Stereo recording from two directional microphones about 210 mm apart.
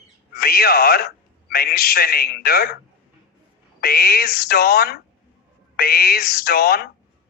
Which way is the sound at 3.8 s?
45° left (ahead or behind).